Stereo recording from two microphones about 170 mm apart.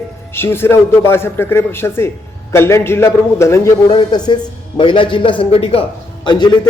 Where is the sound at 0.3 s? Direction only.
15° left (ahead or behind).